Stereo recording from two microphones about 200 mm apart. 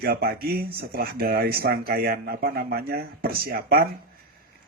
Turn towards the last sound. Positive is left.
turn(degrees=-50)  # may be behind; listen again after turning